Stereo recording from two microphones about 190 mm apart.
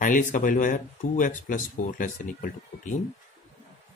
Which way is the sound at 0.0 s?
45° left (ahead or behind).